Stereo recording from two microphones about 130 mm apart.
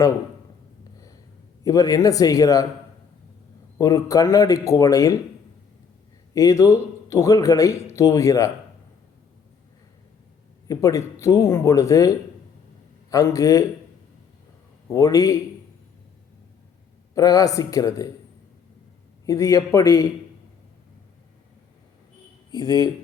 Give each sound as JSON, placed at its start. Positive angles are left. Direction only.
{"t": 1.6, "sound": "a man's voice", "side_deg": 30}
{"t": 3.8, "sound": "a man's voice", "side_deg": 25}
{"t": 6.3, "sound": "a man's voice", "side_deg": 25}
{"t": 10.7, "sound": "a man's voice", "side_deg": 25}
{"t": 14.9, "sound": "a man's voice", "side_deg": 25}
{"t": 17.2, "sound": "a man's voice", "side_deg": 25}
{"t": 19.2, "sound": "a man's voice", "side_deg": 25}
{"t": 22.5, "sound": "speech", "side_deg": 30}